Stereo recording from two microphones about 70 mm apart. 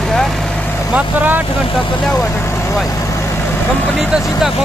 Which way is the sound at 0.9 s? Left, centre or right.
Right.